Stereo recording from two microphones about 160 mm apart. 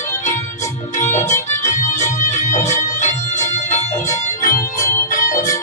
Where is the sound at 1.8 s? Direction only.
50° left (ahead or behind).